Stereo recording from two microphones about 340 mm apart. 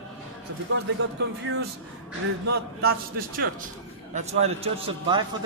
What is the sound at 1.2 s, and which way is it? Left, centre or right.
Speech, right.